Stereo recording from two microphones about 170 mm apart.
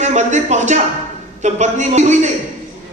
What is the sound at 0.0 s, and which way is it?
A man's voice, 45° right (ahead or behind).